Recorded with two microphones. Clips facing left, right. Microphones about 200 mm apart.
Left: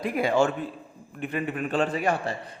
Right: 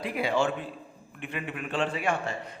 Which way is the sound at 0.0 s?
45° left (ahead or behind).